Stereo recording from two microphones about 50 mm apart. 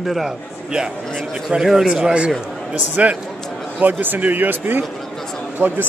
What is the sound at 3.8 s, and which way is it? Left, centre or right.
Speech, right.